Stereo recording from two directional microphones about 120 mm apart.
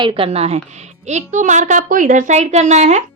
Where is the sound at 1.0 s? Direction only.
80° right.